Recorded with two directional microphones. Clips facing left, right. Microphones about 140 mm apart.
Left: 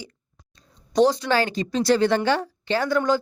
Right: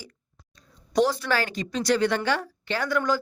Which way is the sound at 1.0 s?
20° left (ahead or behind).